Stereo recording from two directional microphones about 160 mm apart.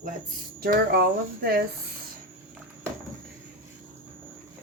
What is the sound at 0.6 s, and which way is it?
Speech, 80° right.